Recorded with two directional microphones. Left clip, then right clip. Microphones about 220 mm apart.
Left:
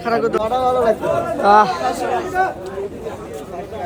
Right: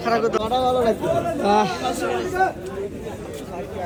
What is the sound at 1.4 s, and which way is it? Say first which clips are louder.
Speech: left 10 dB; 20° left (ahead or behind).